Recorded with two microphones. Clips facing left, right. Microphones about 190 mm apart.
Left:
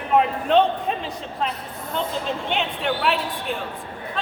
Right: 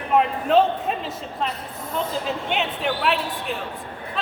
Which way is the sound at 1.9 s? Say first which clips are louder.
Even; 5° right (ahead or behind).